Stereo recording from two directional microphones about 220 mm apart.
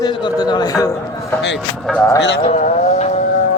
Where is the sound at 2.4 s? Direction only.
30° left (ahead or behind).